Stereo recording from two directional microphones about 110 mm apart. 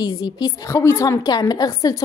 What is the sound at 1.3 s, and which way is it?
Speech, 35° left (ahead or behind).